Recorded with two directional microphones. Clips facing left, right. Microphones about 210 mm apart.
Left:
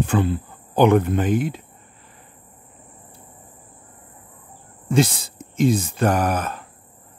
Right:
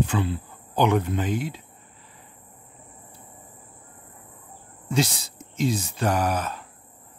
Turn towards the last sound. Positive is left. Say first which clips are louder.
# left 3 dB
turn(degrees=55)  # may be behind; listen again after turning